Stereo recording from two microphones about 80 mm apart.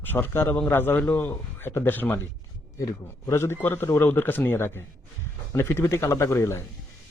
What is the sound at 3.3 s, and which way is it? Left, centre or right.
A man's voice, left.